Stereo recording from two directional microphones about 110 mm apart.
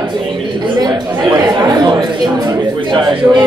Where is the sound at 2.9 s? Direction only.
45° right (ahead or behind).